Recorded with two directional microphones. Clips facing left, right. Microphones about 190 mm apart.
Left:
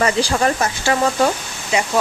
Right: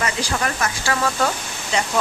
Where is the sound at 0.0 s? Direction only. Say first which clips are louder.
Left 7 dB; 30° left (ahead or behind).